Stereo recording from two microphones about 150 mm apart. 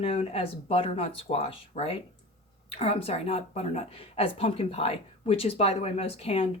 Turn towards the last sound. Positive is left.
turn(degrees=40)  # may be behind; listen again after turning